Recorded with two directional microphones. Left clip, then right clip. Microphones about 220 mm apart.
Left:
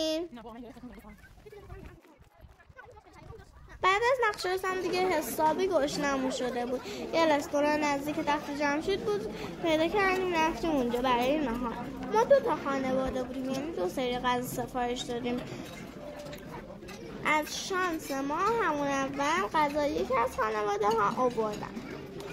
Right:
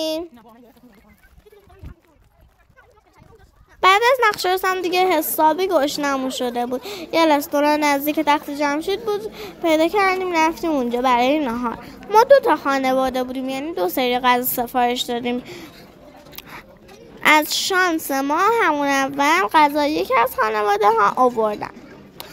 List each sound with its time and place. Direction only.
3.8 s a woman's voice: 45° right (ahead or behind)
17.2 s a child's voice: 50° right (ahead or behind)